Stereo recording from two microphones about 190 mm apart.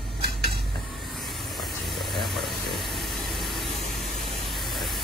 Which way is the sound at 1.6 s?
Centre (ahead or behind).